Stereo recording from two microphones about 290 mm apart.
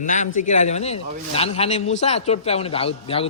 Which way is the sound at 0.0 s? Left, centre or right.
Left.